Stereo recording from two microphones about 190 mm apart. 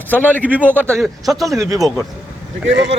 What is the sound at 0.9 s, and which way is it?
Speech, centre (ahead or behind).